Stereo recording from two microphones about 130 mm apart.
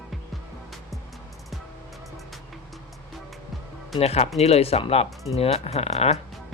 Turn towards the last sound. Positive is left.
turn(degrees=55)  # may be behind; listen again after turning